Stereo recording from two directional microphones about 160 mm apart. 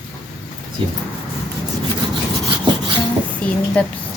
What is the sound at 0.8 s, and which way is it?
Rub, 35° right (ahead or behind).